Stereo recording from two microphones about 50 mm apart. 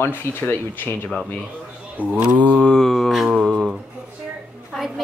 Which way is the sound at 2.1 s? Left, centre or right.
Right.